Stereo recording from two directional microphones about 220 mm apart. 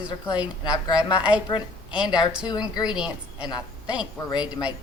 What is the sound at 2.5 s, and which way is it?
Speech, 20° left (ahead or behind).